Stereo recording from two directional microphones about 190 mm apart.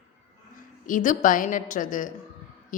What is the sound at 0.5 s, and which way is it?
A woman's voice, 45° left (ahead or behind).